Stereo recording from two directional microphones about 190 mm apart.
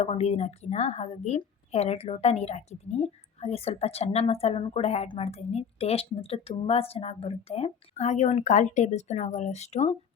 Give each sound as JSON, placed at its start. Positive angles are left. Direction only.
{"t": 0.0, "sound": "a woman's voice", "side_deg": 35}